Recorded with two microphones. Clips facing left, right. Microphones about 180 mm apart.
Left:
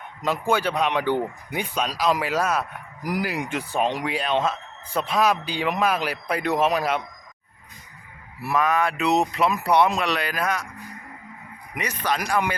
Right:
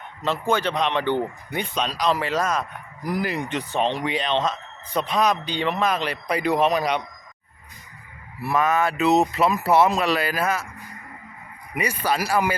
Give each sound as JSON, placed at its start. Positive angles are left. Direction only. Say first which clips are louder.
{"t": 0.2, "sound": "a man's voice", "louder": "even", "side_deg": 10}
{"t": 8.4, "sound": "speech", "louder": "right 1 dB", "side_deg": 0}
{"t": 11.7, "sound": "speech", "louder": "right 2 dB", "side_deg": -10}